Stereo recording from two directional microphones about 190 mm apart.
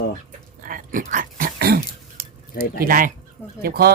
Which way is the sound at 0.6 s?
45° right (ahead or behind).